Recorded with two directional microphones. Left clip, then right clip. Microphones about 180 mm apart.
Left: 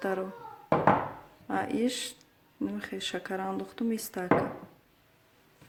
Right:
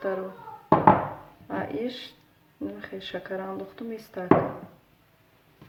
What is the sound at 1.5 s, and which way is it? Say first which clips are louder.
Speech: left 1 dB; 70° left (ahead or behind).